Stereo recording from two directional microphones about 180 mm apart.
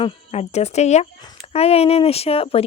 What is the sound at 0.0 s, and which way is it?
Speech, 35° left (ahead or behind).